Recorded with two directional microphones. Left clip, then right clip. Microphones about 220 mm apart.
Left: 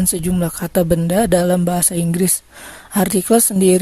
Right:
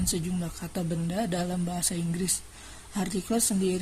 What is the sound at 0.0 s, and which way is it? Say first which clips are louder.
Speech: left 12 dB; 50° left (ahead or behind).